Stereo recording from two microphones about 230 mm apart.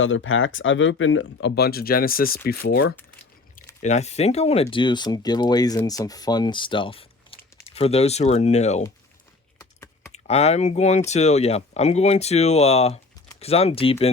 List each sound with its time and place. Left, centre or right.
0.0 s speech: left
2.9 s a sound: centre
3.8 s speech: left
10.1 s speech: left